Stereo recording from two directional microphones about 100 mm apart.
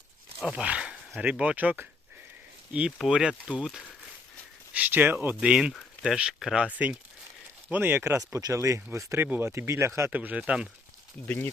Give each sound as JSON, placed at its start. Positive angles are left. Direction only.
{"t": 0.5, "sound": "speech", "side_deg": -10}
{"t": 10.1, "sound": "speech", "side_deg": -15}